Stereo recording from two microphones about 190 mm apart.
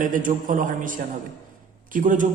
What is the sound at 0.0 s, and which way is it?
A man's voice, 45° right (ahead or behind).